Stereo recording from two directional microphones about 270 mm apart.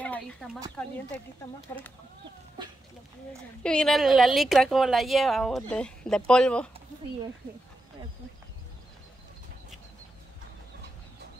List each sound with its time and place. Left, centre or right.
0.0 s a sound: centre
0.8 s speech: centre
2.6 s speech: centre
3.6 s speech: centre